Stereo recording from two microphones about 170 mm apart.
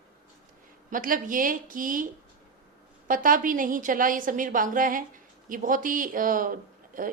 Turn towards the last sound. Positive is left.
turn(degrees=-50)  # may be behind; listen again after turning